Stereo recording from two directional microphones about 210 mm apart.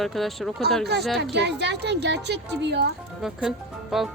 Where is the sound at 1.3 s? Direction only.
55° right (ahead or behind).